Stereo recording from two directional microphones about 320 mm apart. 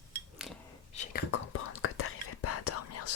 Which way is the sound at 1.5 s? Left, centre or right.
Left.